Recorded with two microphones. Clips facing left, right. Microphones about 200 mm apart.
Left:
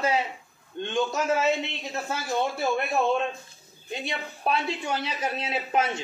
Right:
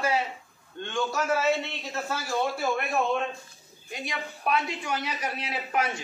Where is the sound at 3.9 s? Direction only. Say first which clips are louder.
Left 2 dB; 25° left (ahead or behind).